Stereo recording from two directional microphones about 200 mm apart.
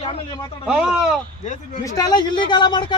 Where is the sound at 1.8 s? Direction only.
20° left (ahead or behind).